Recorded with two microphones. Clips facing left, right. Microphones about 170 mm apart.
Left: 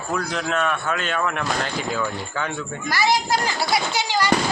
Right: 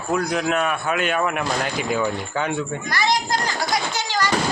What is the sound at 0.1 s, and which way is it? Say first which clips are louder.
A man's voice: right 4 dB; 10° right (ahead or behind).